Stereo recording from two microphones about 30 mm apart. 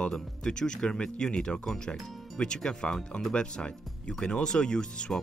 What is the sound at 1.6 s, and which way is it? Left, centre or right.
Speech, centre.